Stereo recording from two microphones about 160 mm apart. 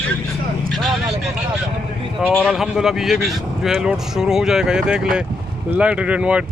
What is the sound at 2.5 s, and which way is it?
Speech, 5° right (ahead or behind).